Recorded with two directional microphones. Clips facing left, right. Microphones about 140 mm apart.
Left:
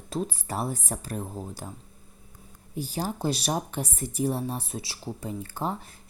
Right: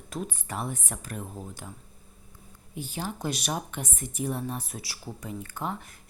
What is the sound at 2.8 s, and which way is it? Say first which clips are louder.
Speech: left 4 dB; 35° left (ahead or behind).